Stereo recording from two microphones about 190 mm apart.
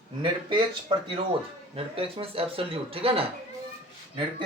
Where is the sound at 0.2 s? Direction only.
25° right (ahead or behind).